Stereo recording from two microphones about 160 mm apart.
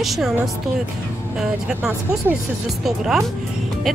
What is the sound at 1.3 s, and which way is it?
Speech, 5° right (ahead or behind).